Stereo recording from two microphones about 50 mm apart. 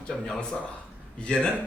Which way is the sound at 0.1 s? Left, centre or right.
Centre.